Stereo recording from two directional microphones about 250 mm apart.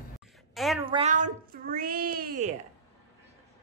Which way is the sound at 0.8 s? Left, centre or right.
Right.